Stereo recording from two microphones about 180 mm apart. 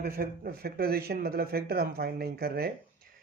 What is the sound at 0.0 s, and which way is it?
Speech, 55° right (ahead or behind).